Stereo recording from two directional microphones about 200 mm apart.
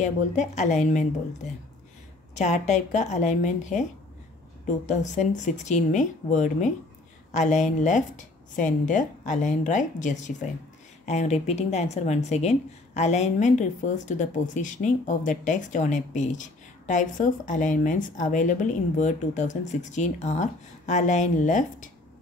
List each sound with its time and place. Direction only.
0.0 s speech: 35° left (ahead or behind)
2.3 s speech: 35° left (ahead or behind)